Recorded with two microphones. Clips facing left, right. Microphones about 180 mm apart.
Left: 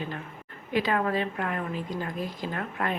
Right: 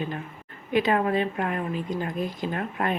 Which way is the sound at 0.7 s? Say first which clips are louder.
Right 3 dB; 20° right (ahead or behind).